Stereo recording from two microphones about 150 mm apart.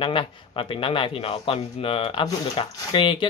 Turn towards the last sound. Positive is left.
turn(degrees=35)  # may be behind; listen again after turning